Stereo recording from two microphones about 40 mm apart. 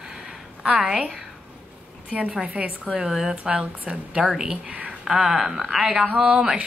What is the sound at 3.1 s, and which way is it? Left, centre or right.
A woman's voice, centre.